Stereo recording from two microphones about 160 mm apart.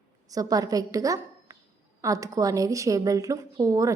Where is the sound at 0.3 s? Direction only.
20° right (ahead or behind).